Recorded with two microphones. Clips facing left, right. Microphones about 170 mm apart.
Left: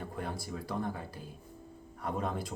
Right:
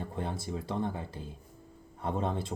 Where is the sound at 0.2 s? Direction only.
25° right (ahead or behind).